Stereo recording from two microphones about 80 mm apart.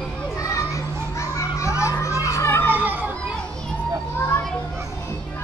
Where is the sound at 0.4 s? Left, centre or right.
Left.